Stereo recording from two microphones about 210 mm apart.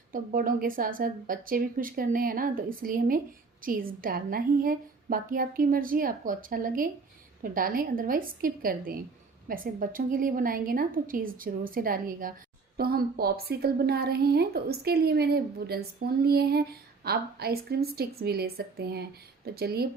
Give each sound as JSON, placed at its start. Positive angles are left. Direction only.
{"t": 0.1, "sound": "a woman's voice", "side_deg": -40}